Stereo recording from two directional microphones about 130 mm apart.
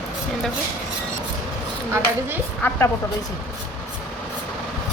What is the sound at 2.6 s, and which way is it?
Speech, 15° left (ahead or behind).